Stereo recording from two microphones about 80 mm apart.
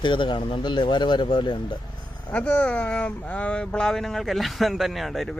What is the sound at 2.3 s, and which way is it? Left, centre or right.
Speech, centre.